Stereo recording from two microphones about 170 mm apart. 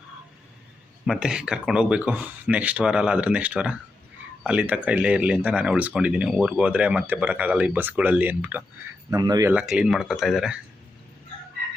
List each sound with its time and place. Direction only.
1.0 s speech: 5° right (ahead or behind)
9.0 s speech: 20° right (ahead or behind)
9.5 s speech: 5° right (ahead or behind)